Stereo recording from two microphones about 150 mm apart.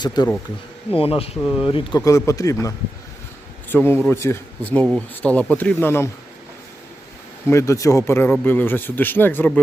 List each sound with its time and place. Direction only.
0.0 s a man's voice: 30° left (ahead or behind)
2.0 s a man's voice: 20° left (ahead or behind)
7.5 s speech: 20° left (ahead or behind)